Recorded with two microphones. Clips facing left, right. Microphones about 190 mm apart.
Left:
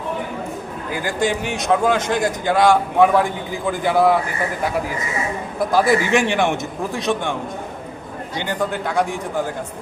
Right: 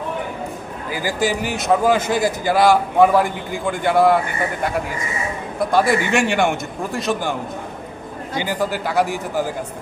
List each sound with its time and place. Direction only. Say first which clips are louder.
0.9 s a man's voice: even; 5° right (ahead or behind)
5.5 s a man's voice: even; centre (ahead or behind)
8.4 s a man's voice: right 1 dB; 5° right (ahead or behind)